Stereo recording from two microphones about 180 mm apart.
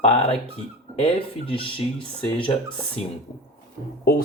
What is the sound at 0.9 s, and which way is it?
Speech, 30° left (ahead or behind).